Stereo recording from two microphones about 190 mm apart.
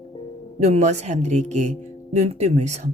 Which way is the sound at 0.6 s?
35° right (ahead or behind).